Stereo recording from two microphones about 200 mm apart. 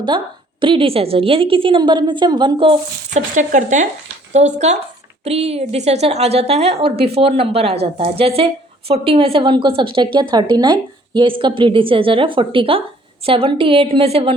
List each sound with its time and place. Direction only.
0.6 s a woman's voice: 25° right (ahead or behind)
3.1 s a woman's voice: 40° right (ahead or behind)